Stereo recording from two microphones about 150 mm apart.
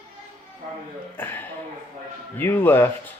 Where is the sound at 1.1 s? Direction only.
15° left (ahead or behind).